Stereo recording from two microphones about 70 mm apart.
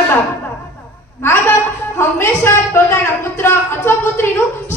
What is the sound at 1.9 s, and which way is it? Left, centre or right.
A woman's voice, left.